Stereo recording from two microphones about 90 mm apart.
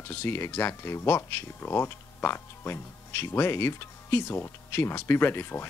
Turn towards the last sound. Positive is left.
turn(degrees=25)  # may be behind; listen again after turning